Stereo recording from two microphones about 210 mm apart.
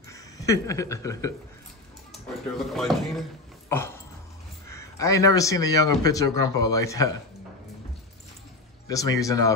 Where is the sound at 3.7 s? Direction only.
10° left (ahead or behind).